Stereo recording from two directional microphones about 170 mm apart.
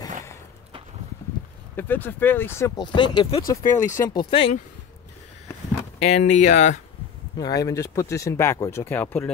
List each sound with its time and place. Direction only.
1.8 s speech: 10° left (ahead or behind); by 4.6 s 30° left (ahead or behind)
5.9 s speech: 40° left (ahead or behind)
7.3 s speech: 20° left (ahead or behind)